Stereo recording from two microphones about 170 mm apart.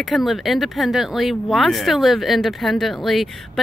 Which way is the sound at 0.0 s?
Centre (ahead or behind).